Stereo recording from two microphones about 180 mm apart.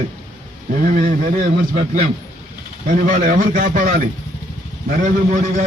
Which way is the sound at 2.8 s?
45° right (ahead or behind).